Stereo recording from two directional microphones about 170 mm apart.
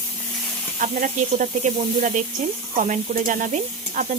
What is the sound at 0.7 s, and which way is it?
Sizzle, 50° right (ahead or behind).